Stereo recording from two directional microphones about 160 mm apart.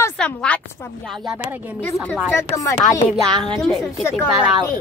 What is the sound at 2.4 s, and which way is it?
Speech, 20° left (ahead or behind).